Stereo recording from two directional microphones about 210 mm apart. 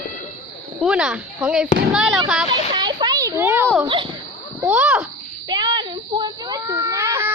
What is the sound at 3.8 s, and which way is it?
Speech, 20° right (ahead or behind).